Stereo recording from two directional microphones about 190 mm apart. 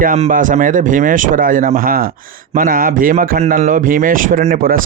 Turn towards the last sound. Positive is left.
turn(degrees=-50)  # may be behind; listen again after turning